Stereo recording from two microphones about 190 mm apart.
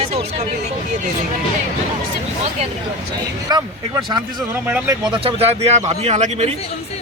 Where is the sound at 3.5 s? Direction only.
20° right (ahead or behind); by 6.6 s 35° right (ahead or behind).